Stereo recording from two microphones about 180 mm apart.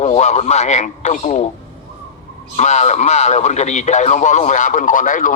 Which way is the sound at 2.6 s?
40° left (ahead or behind).